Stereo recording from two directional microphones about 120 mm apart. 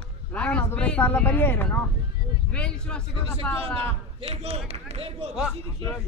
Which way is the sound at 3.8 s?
55° right (ahead or behind).